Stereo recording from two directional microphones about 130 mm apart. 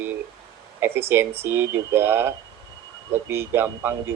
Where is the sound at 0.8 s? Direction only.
20° right (ahead or behind).